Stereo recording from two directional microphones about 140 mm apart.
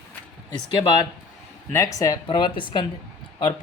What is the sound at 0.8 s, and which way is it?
Speech, 30° left (ahead or behind).